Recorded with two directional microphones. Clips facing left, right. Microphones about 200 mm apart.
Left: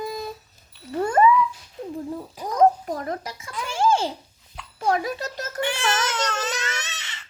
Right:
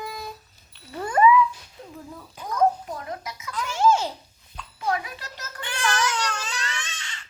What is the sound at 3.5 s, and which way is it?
Speech, 30° left (ahead or behind).